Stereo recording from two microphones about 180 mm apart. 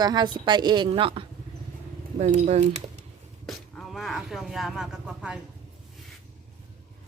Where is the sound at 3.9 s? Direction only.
Centre (ahead or behind).